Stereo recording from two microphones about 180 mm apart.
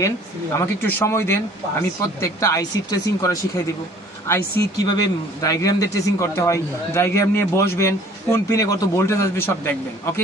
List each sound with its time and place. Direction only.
0.0 s a man's voice: 15° left (ahead or behind)